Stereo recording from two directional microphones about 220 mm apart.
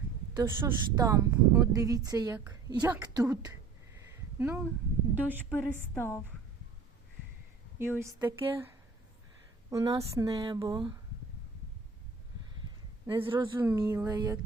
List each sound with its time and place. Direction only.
0.3 s a woman's voice: 15° right (ahead or behind)
2.9 s a woman's voice: 5° right (ahead or behind)
3.2 s a woman's voice: 15° right (ahead or behind)
5.9 s a woman's voice: 10° left (ahead or behind)
7.8 s a woman's voice: 10° right (ahead or behind)
13.1 s a woman's voice: 25° right (ahead or behind)